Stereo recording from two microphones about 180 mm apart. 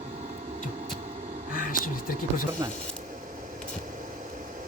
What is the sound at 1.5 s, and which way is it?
Speech, 50° left (ahead or behind).